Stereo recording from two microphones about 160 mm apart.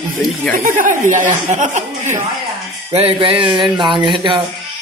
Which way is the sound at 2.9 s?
35° right (ahead or behind).